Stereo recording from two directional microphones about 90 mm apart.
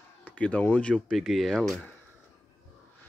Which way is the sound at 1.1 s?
Centre (ahead or behind).